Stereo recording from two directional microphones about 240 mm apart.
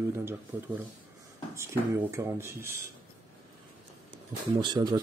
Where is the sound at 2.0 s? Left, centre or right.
Centre.